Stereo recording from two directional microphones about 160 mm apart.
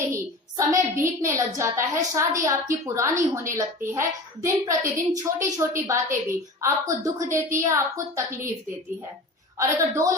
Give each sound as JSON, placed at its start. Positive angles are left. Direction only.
{"t": 0.1, "sound": "a sound", "side_deg": -20}
{"t": 0.9, "sound": "a woman's voice", "side_deg": -20}
{"t": 9.6, "sound": "a woman's voice", "side_deg": -20}